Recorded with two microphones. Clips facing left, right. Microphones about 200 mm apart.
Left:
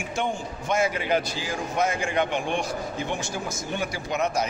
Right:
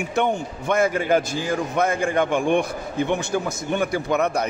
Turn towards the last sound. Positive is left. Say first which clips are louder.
# right 5 dB
turn(degrees=-55)  # may be behind; listen again after turning